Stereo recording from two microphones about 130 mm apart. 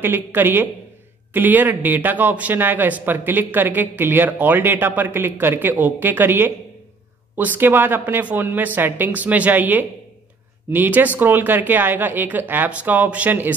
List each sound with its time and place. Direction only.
0.0 s speech: 15° right (ahead or behind)